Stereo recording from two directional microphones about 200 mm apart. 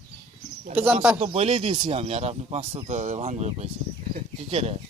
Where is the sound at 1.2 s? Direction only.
30° right (ahead or behind).